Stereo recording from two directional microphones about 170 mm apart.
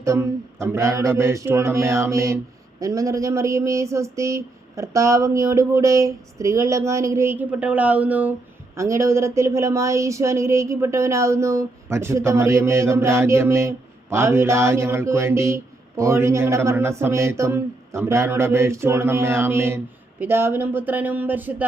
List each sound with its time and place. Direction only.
0.0 s speech: 15° right (ahead or behind)